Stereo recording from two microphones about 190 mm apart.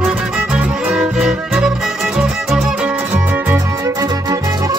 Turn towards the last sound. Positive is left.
turn(degrees=-20)  # may be behind; listen again after turning